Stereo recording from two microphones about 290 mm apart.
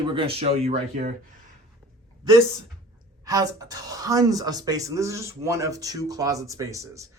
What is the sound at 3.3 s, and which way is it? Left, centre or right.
Speech, centre.